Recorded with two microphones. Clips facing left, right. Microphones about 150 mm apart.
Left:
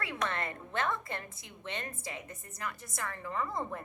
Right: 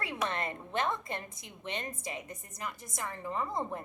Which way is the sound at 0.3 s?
20° right (ahead or behind).